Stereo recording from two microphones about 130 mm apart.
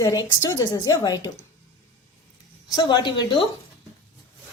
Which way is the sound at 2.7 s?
35° left (ahead or behind).